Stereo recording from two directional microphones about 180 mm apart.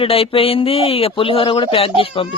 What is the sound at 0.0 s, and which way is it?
Speech, 30° left (ahead or behind).